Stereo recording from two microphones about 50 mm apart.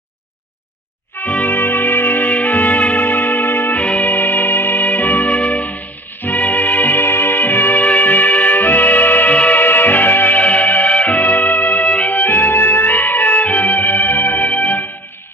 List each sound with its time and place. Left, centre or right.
1.1 s music: left
3.8 s music: left
4.0 s music: left
9.6 s music: left